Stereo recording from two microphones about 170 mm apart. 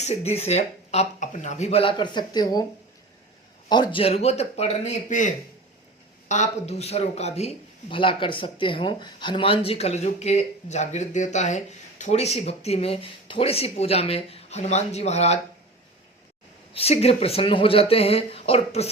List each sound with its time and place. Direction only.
0.0 s a man's voice: 40° left (ahead or behind); by 2.6 s 25° left (ahead or behind)
3.7 s a man's voice: 30° left (ahead or behind)
16.7 s a man's voice: 35° left (ahead or behind)